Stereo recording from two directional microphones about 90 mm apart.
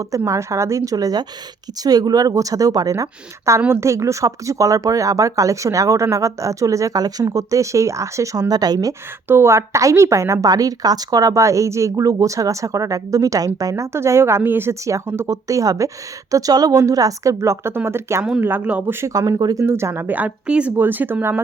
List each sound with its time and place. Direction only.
0.3 s a woman's voice: 35° right (ahead or behind)
9.2 s a woman's voice: 30° right (ahead or behind)
19.4 s a woman's voice: 45° right (ahead or behind)
19.6 s speech: 30° right (ahead or behind)